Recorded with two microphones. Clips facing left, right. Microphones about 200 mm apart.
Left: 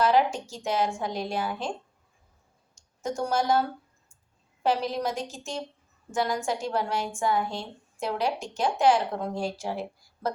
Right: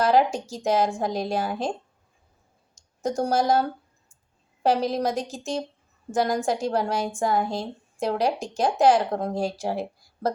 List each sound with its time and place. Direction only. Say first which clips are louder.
0.0 s a woman's voice: right 2 dB; 40° right (ahead or behind)
3.0 s a woman's voice: right 4 dB; 40° right (ahead or behind)